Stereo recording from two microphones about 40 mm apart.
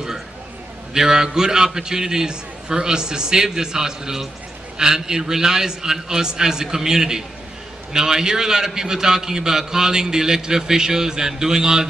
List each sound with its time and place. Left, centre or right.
0.9 s a man's voice: centre